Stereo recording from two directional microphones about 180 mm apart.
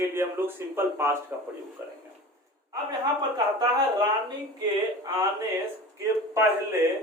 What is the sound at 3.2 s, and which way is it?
Speech, 25° right (ahead or behind).